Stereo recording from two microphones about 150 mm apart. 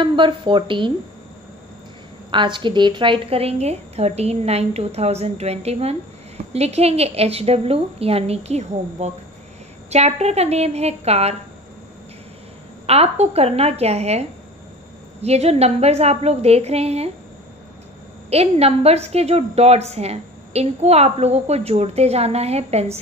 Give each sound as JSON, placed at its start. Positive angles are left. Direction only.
{"t": 0.0, "sound": "speech", "side_deg": -35}
{"t": 2.3, "sound": "a woman's voice", "side_deg": -30}
{"t": 12.8, "sound": "a woman's voice", "side_deg": -45}
{"t": 15.2, "sound": "a woman's voice", "side_deg": -45}
{"t": 18.3, "sound": "a woman's voice", "side_deg": -45}